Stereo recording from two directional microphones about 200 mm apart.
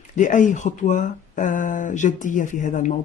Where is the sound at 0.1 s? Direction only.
40° left (ahead or behind).